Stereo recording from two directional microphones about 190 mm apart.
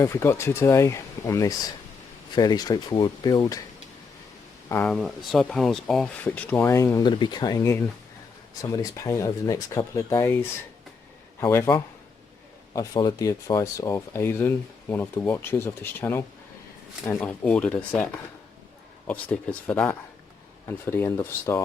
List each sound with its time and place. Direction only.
0.0 s speech: 15° left (ahead or behind)
4.7 s speech: 5° left (ahead or behind)